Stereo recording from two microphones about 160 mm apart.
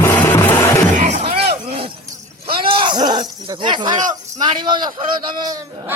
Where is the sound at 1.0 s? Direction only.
45° right (ahead or behind).